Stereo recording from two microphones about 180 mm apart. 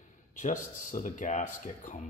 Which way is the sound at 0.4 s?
45° left (ahead or behind).